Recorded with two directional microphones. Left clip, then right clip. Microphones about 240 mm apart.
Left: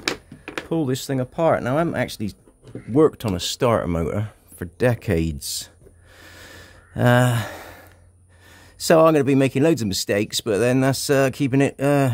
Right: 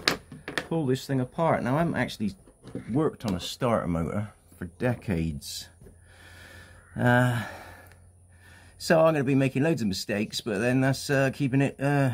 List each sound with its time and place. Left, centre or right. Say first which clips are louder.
0.7 s speech: left 6 dB; left
6.1 s a sound: left 6 dB; left
8.7 s speech: left 7 dB; left